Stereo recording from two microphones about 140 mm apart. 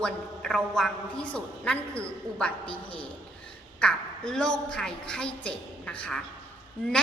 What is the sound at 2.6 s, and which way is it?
Speech, 40° left (ahead or behind).